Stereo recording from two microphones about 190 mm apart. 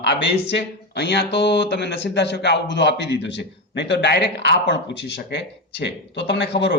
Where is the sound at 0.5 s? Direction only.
65° left (ahead or behind).